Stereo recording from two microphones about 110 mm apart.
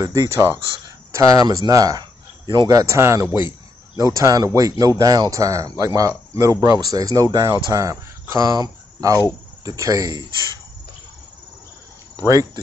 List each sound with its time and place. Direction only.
0.0 s speech: 30° right (ahead or behind)